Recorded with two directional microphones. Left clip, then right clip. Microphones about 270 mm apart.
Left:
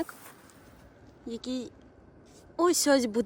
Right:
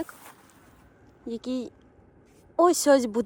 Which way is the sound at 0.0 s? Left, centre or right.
Centre.